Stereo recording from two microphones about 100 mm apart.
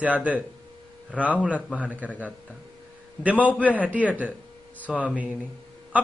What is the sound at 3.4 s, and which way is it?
Speech, 15° right (ahead or behind).